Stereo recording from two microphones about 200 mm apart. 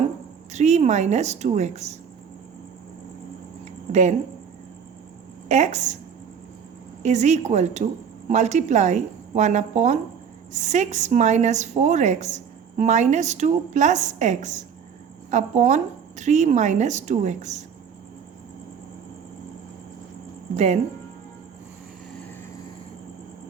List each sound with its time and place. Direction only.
0.5 s a woman's voice: 35° right (ahead or behind)
5.5 s a woman's voice: 35° right (ahead or behind)
7.0 s a woman's voice: 35° right (ahead or behind)